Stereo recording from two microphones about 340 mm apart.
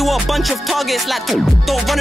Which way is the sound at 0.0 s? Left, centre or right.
Centre.